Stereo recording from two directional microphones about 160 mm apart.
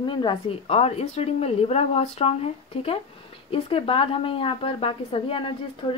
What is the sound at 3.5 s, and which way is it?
A woman's voice, 35° left (ahead or behind).